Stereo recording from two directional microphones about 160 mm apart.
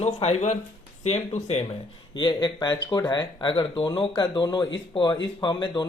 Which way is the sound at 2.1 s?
25° left (ahead or behind).